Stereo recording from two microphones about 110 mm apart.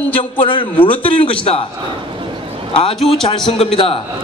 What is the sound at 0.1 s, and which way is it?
A man's voice, 55° left (ahead or behind).